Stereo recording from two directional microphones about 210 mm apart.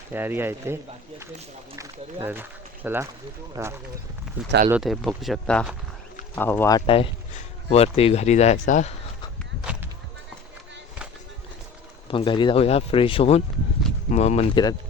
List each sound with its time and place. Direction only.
0.1 s speech: 10° right (ahead or behind)
2.2 s speech: 10° right (ahead or behind)
4.7 s speech: centre (ahead or behind); by 9.0 s 35° left (ahead or behind)
12.0 s speech: 25° left (ahead or behind)